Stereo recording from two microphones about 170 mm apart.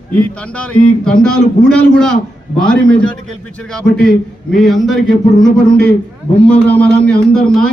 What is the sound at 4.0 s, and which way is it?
Speech, 60° left (ahead or behind).